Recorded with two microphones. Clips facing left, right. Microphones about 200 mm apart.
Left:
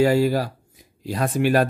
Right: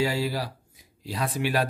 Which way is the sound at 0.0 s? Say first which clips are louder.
Left 9 dB; 50° left (ahead or behind).